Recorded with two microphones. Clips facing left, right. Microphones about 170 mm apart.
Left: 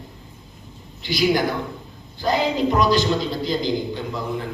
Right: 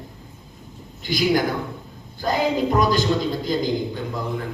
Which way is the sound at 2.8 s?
50° right (ahead or behind).